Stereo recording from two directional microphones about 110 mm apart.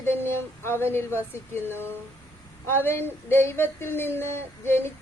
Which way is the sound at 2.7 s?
20° left (ahead or behind).